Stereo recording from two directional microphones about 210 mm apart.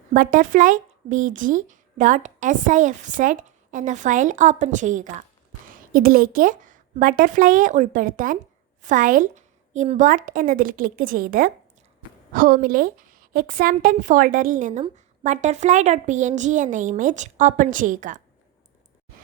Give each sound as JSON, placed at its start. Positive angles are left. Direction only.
{"t": 0.1, "sound": "a woman's voice", "side_deg": -40}